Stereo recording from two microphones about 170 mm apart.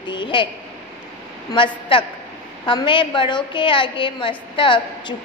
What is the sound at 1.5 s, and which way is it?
A woman's voice, 30° left (ahead or behind).